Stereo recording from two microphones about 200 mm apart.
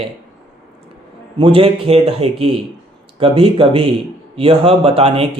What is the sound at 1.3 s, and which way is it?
Speech, 25° right (ahead or behind).